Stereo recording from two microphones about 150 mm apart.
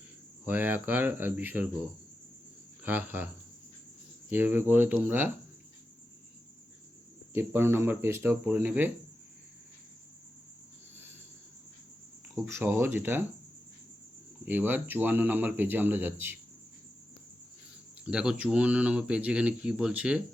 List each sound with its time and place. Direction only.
0.4 s speech: 10° right (ahead or behind)
2.8 s speech: 10° right (ahead or behind)
4.3 s speech: 10° right (ahead or behind)
7.3 s speech: 15° right (ahead or behind)
12.3 s speech: 15° right (ahead or behind)
14.4 s speech: 10° right (ahead or behind)
18.0 s speech: 5° right (ahead or behind)